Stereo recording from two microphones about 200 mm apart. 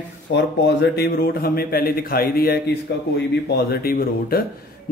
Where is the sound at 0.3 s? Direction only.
55° left (ahead or behind).